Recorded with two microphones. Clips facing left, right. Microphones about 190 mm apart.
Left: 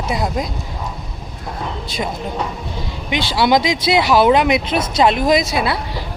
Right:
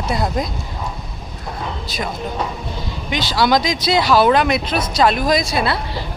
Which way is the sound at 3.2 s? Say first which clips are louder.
Left 1 dB; 25° left (ahead or behind).